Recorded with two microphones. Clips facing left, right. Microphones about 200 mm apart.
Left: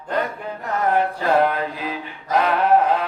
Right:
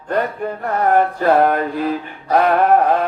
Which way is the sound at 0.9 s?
50° right (ahead or behind).